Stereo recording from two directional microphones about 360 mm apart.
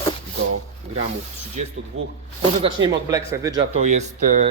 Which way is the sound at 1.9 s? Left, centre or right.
Right.